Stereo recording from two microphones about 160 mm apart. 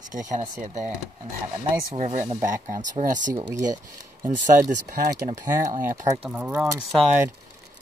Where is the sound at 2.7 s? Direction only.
55° right (ahead or behind).